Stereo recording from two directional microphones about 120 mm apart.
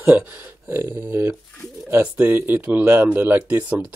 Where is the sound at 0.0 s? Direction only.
15° right (ahead or behind).